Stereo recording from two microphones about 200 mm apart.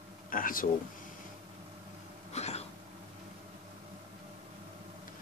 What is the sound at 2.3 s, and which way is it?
Cough, 30° left (ahead or behind).